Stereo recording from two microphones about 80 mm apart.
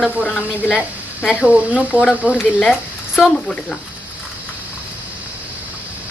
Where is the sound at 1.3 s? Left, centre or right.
Centre.